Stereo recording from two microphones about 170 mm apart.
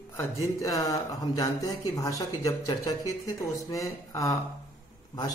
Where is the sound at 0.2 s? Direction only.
20° left (ahead or behind).